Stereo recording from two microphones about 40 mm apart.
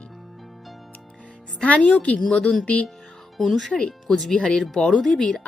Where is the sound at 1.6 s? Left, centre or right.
Left.